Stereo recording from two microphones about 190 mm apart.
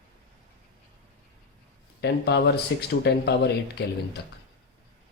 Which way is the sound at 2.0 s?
65° left (ahead or behind).